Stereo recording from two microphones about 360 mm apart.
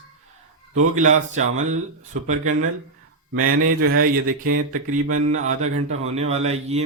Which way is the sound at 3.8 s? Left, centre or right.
Right.